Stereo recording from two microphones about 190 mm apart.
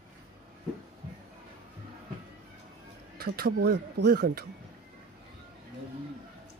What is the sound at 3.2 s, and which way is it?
Speech, 55° right (ahead or behind).